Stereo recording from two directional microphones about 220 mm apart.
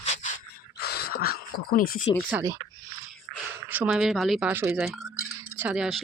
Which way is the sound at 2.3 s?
15° right (ahead or behind).